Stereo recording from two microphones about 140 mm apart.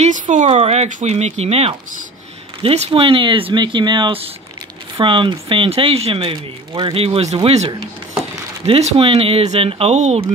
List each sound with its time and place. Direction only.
0.0 s speech: 60° right (ahead or behind)